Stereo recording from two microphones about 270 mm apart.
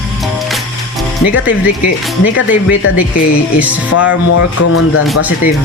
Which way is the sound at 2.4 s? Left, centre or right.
Left.